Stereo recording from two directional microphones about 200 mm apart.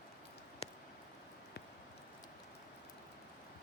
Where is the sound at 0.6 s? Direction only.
30° left (ahead or behind).